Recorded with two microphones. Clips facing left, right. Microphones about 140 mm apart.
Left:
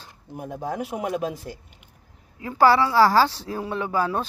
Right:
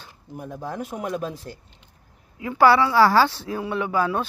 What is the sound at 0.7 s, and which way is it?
Speech, 10° left (ahead or behind).